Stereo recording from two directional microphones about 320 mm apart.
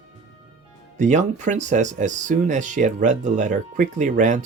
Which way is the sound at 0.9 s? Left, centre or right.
Right.